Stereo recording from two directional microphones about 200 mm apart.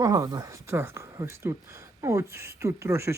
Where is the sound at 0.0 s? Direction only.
15° right (ahead or behind).